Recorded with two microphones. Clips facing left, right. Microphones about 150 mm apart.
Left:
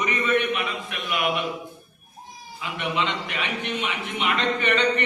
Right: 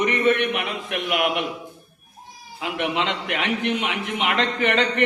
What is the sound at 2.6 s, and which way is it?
A man's voice, 85° right.